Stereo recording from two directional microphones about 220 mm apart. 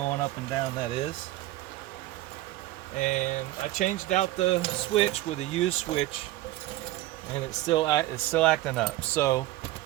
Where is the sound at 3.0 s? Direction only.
30° left (ahead or behind).